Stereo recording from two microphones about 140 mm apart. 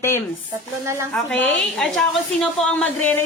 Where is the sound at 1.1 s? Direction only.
5° left (ahead or behind).